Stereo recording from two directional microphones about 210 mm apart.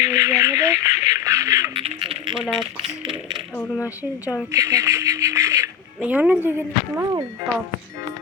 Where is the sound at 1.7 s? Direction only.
25° right (ahead or behind).